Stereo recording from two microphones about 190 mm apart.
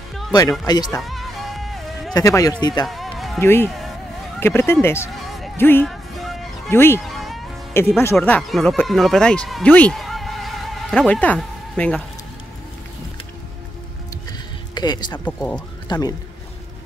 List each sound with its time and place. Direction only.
0.3 s speech: 20° left (ahead or behind)
1.0 s music: centre (ahead or behind)
2.1 s speech: 20° left (ahead or behind)
2.9 s music: centre (ahead or behind)
3.3 s speech: 10° left (ahead or behind)
7.1 s music: centre (ahead or behind)
8.0 s speech: 10° left (ahead or behind)
14.7 s speech: 20° left (ahead or behind)
15.1 s speech: 10° left (ahead or behind)
15.9 s speech: 20° left (ahead or behind)